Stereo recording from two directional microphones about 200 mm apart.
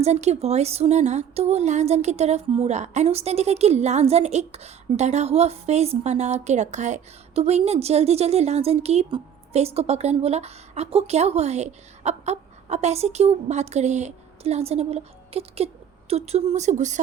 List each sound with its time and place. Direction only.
0.0 s a woman's voice: 35° right (ahead or behind)